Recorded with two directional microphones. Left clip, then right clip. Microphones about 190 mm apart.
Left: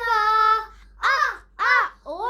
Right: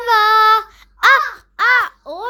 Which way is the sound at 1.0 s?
35° right (ahead or behind).